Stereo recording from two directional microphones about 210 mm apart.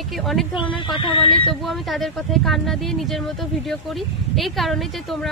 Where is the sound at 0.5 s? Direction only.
25° left (ahead or behind).